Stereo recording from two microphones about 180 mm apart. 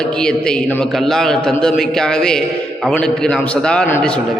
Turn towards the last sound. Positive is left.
turn(degrees=10)  # may be behind; listen again after turning